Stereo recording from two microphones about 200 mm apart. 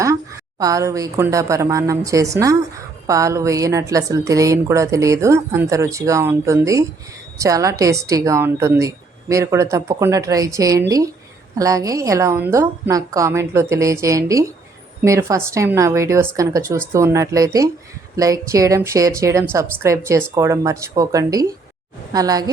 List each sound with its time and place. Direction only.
0.6 s a woman's voice: 15° right (ahead or behind)